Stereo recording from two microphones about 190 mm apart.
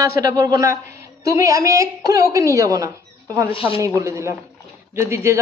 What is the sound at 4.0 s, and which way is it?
Speech, 15° right (ahead or behind).